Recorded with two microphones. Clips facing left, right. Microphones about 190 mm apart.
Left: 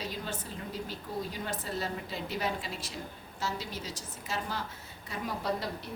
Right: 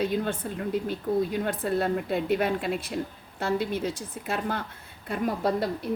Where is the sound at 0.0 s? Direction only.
55° right (ahead or behind).